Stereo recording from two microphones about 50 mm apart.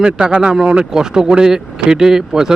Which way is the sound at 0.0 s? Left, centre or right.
Right.